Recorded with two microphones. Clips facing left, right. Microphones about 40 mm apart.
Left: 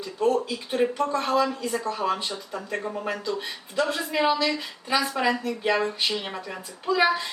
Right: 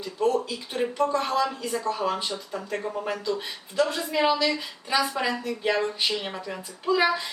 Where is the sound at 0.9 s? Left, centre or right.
Centre.